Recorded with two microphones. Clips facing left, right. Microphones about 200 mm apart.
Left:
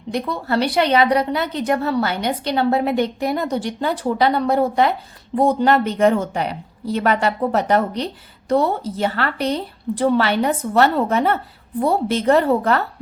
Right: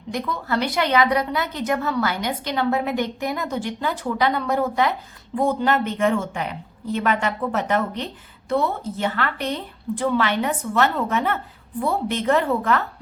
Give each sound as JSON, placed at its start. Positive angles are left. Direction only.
{"t": 0.1, "sound": "a woman's voice", "side_deg": 30}